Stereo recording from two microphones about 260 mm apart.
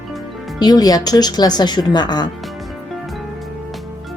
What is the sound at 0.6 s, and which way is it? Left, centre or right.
Speech, centre.